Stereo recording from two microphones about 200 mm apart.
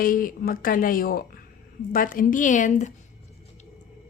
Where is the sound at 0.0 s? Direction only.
45° left (ahead or behind).